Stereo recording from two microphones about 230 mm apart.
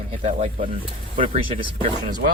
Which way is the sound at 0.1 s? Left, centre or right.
Right.